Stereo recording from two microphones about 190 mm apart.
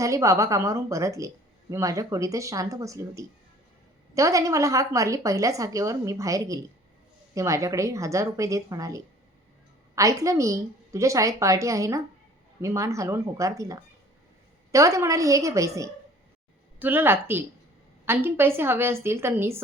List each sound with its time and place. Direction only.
0.0 s a woman's voice: 15° right (ahead or behind)